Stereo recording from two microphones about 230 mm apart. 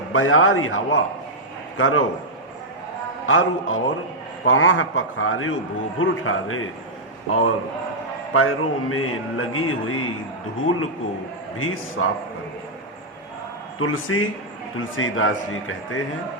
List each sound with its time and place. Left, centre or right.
0.1 s speech: left
3.2 s a man's voice: left
11.5 s speech: left
13.7 s speech: left